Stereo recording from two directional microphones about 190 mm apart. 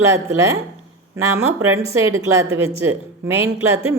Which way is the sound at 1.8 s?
15° right (ahead or behind).